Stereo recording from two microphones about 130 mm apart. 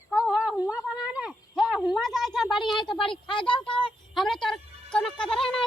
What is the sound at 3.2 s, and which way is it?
Speech, 40° left (ahead or behind).